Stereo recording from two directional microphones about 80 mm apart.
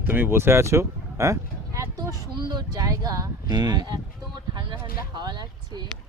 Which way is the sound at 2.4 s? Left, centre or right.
Right.